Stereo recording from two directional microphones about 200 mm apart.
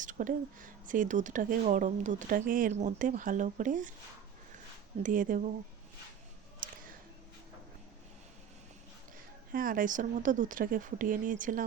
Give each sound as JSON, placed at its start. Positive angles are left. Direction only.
{"t": 0.0, "sound": "speech", "side_deg": -40}
{"t": 5.0, "sound": "speech", "side_deg": -40}
{"t": 9.5, "sound": "speech", "side_deg": -45}